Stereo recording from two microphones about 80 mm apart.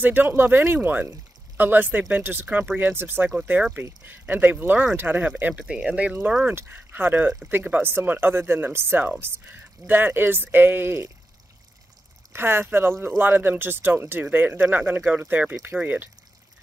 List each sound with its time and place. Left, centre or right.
0.0 s speech: right
12.3 s speech: right